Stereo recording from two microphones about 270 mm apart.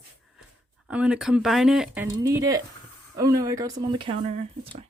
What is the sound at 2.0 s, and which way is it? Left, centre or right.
Speech, centre.